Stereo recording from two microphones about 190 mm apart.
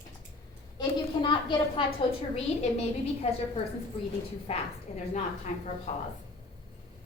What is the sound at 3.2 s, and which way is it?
Speech, 30° left (ahead or behind).